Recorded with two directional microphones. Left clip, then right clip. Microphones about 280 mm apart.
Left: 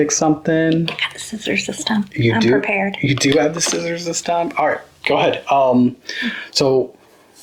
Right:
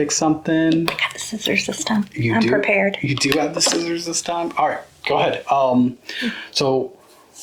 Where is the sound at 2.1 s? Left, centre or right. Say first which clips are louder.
Left 4 dB; left.